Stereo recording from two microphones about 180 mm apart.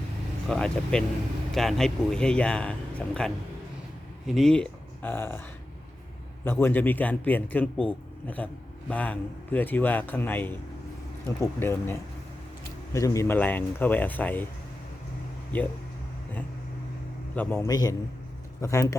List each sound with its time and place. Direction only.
0.4 s speech: 5° left (ahead or behind)
4.3 s speech: centre (ahead or behind)
6.4 s speech: 10° left (ahead or behind)
17.3 s speech: 10° left (ahead or behind)